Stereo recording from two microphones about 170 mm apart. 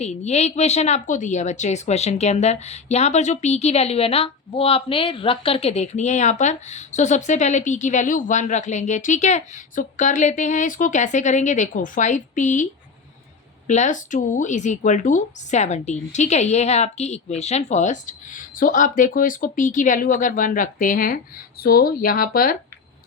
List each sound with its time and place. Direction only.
0.0 s speech: 40° left (ahead or behind)
13.7 s speech: 45° left (ahead or behind)